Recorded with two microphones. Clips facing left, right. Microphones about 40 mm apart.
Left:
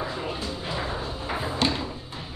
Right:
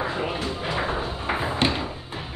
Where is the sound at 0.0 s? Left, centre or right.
Right.